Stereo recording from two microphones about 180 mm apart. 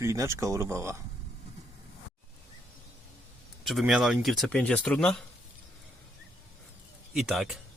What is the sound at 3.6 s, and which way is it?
Speech, centre (ahead or behind).